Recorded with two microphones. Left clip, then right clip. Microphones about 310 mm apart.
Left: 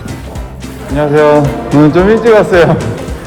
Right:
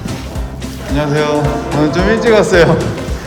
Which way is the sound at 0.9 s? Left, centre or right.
Centre.